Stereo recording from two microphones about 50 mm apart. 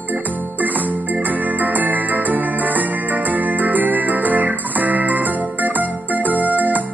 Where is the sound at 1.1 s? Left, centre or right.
Right.